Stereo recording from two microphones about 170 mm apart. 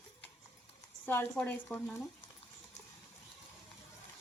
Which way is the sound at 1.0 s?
10° left (ahead or behind).